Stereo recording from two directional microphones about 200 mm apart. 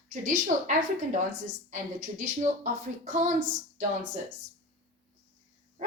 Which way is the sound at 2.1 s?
40° right (ahead or behind).